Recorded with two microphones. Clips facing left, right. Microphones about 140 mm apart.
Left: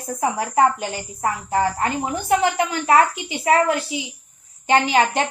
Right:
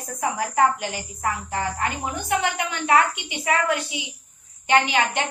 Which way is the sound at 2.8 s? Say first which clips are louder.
Left 2 dB; 30° left (ahead or behind).